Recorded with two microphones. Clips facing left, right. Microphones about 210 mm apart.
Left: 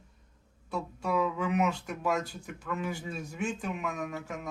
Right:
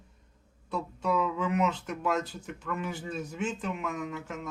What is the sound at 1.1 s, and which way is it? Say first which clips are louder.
A man's voice: left 1 dB; 10° left (ahead or behind).